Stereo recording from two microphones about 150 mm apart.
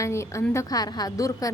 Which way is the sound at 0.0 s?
20° left (ahead or behind).